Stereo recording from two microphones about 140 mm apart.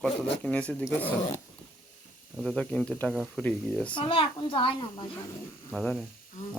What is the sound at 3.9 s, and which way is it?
A child's voice, 40° left (ahead or behind).